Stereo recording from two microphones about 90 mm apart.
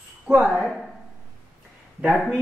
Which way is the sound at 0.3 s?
10° right (ahead or behind).